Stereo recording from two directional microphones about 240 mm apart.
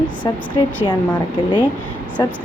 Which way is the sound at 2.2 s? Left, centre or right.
Centre.